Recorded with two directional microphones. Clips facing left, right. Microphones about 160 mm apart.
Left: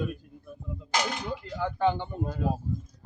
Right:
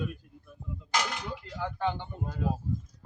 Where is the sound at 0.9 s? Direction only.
20° left (ahead or behind).